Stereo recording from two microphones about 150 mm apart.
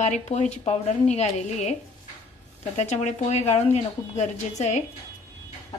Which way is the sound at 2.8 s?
50° left (ahead or behind).